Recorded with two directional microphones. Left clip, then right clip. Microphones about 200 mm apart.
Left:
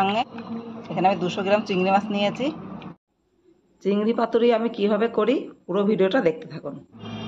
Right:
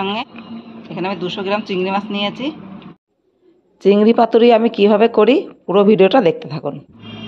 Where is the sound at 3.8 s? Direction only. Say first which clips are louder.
Right 11 dB; 40° right (ahead or behind).